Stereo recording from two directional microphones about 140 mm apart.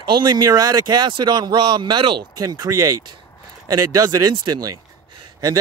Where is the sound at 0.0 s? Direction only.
30° right (ahead or behind).